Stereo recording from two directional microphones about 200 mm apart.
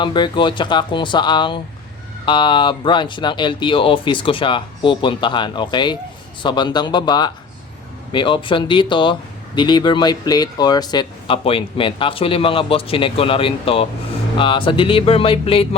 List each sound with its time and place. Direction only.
0.0 s speech: 25° left (ahead or behind)